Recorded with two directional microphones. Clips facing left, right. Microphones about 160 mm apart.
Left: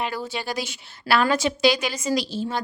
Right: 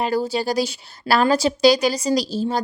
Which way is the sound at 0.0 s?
35° right (ahead or behind).